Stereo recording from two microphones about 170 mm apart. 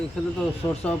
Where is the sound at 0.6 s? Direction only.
20° left (ahead or behind).